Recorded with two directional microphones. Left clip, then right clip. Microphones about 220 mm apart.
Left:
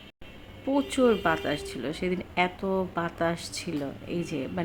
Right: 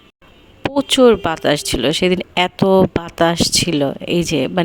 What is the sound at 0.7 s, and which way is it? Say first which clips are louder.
Speech: right 12 dB; 45° right (ahead or behind).